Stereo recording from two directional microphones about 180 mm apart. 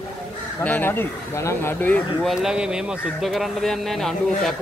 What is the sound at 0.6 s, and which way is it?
Speech, 10° left (ahead or behind).